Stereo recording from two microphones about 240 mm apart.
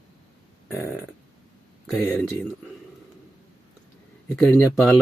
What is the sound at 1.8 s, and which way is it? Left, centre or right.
Speech, centre.